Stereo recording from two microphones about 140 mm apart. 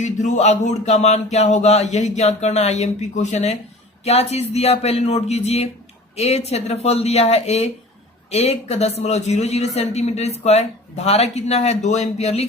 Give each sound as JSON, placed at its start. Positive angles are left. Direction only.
{"t": 0.0, "sound": "a man's voice", "side_deg": 60}